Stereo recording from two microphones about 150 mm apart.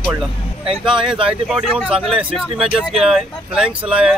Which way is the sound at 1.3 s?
5° right (ahead or behind).